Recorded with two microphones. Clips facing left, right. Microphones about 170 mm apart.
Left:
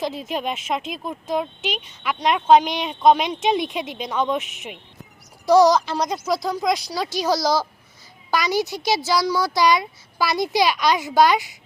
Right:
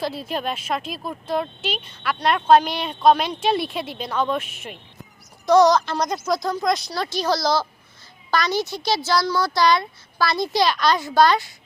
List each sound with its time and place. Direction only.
0.0 s speech: 15° left (ahead or behind)